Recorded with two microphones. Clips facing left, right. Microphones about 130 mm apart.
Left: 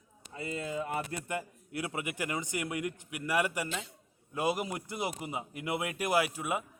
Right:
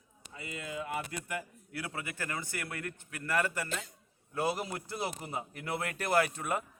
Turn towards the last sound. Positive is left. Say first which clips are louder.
# even
turn(degrees=5)  # may be behind; listen again after turning